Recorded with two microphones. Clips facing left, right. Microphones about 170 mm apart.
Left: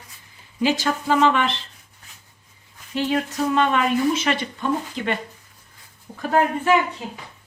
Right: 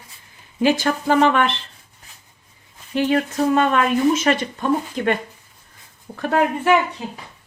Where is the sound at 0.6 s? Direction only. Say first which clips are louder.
Right 3 dB; 50° right (ahead or behind).